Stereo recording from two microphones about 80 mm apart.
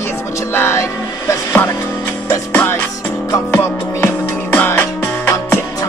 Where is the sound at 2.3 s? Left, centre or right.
Left.